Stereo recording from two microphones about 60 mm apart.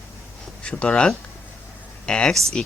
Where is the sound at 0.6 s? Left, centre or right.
Centre.